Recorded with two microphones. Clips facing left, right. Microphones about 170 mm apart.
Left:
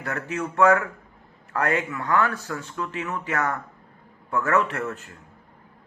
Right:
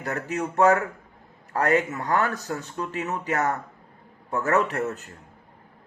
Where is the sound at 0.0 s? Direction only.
35° right (ahead or behind).